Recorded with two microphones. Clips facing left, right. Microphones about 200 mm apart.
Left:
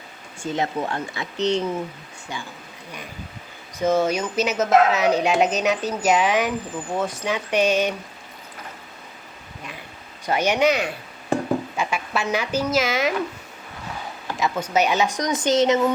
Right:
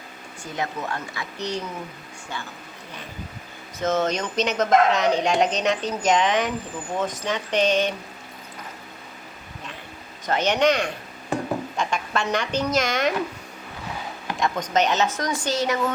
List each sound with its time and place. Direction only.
0.4 s speech: 25° left (ahead or behind)
3.8 s speech: 10° left (ahead or behind)
10.2 s speech: 10° left (ahead or behind)
14.3 s speech: 5° left (ahead or behind); by 16.0 s 20° left (ahead or behind)